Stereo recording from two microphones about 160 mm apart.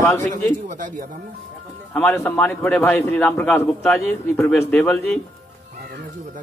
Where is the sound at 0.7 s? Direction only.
55° right (ahead or behind).